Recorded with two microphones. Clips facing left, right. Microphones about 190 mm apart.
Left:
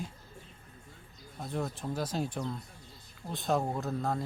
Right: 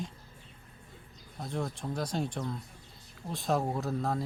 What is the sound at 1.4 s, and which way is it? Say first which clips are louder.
Speech: even; centre (ahead or behind).